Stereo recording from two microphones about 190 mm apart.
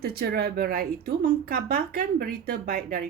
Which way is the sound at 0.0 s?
55° right (ahead or behind).